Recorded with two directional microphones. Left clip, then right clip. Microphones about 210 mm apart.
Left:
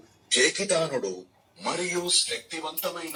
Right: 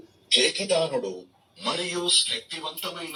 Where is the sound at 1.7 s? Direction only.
5° left (ahead or behind).